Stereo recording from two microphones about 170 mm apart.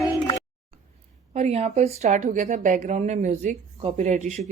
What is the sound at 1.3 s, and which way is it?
Speech, 40° right (ahead or behind).